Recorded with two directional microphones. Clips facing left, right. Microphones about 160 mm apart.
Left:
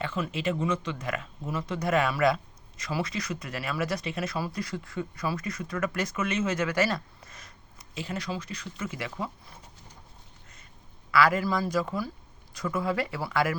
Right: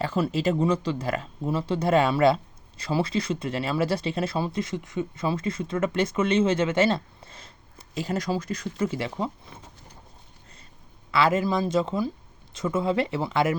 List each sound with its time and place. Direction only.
0.0 s speech: 35° right (ahead or behind)
8.9 s speech: 30° right (ahead or behind)
11.1 s speech: 25° right (ahead or behind)